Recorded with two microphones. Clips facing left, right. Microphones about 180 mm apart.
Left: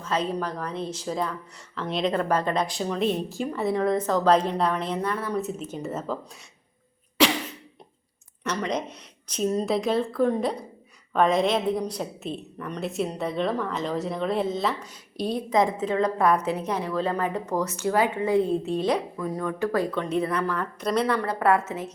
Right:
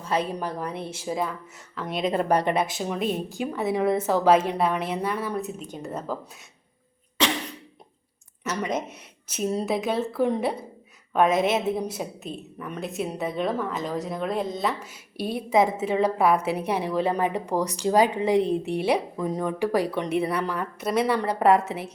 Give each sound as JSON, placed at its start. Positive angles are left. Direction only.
{"t": 0.0, "sound": "a woman's voice", "side_deg": -10}
{"t": 8.4, "sound": "a woman's voice", "side_deg": -5}
{"t": 21.2, "sound": "speech", "side_deg": -20}